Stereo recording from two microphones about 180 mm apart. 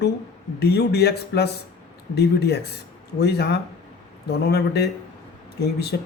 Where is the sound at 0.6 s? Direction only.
65° left (ahead or behind).